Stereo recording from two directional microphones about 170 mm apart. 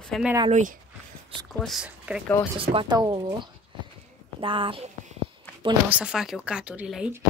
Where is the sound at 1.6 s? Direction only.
5° right (ahead or behind).